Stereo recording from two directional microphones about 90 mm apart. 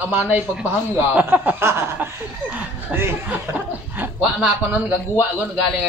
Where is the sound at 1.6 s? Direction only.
30° right (ahead or behind).